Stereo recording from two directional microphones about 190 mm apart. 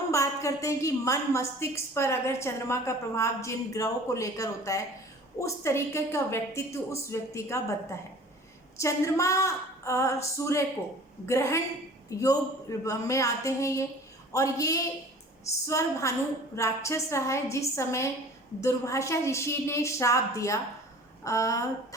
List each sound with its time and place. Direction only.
0.1 s a woman's voice: 15° left (ahead or behind)